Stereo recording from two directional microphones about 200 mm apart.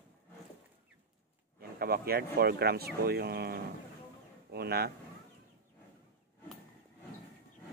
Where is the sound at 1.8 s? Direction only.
50° right (ahead or behind).